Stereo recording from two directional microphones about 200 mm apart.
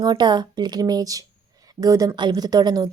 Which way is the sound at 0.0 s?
20° right (ahead or behind).